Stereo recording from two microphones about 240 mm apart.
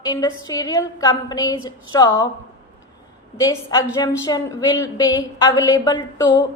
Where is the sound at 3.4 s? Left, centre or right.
Centre.